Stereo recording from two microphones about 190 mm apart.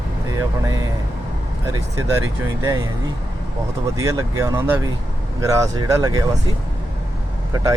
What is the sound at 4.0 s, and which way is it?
Speech, 15° right (ahead or behind).